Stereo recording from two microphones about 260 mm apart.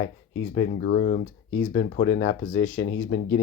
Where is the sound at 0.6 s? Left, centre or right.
Left.